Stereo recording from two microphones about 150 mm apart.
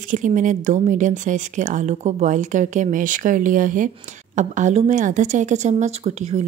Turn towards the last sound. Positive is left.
turn(degrees=-45)  # may be behind; listen again after turning